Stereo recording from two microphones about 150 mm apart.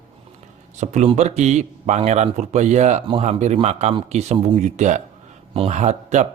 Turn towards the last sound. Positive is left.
turn(degrees=-55)  # may be behind; listen again after turning